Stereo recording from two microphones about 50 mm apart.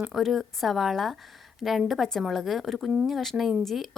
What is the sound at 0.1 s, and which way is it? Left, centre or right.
A woman's voice, centre.